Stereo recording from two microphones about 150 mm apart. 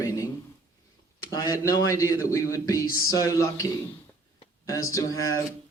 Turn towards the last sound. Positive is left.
turn(degrees=20)  # may be behind; listen again after turning